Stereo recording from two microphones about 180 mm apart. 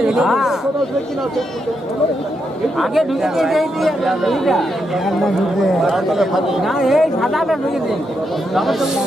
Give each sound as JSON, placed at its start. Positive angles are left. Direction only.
{"t": 0.0, "sound": "speech", "side_deg": -5}
{"t": 2.8, "sound": "speech", "side_deg": 0}
{"t": 8.5, "sound": "speech", "side_deg": 0}